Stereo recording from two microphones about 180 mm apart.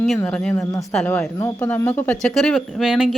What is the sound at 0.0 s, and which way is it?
Speech, 5° left (ahead or behind).